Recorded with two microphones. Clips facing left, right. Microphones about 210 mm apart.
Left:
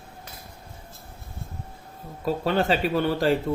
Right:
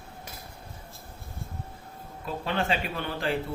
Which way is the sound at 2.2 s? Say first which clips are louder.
Left 6 dB; 40° left (ahead or behind).